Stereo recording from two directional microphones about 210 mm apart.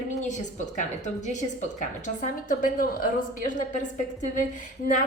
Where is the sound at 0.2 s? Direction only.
35° left (ahead or behind).